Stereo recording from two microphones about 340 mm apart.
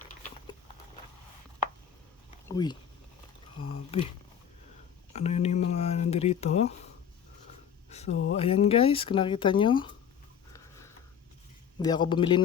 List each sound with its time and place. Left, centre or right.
2.5 s speech: centre
5.1 s speech: centre
7.9 s speech: centre
8.1 s speech: left
8.4 s speech: centre
10.5 s a sound: centre
11.8 s speech: centre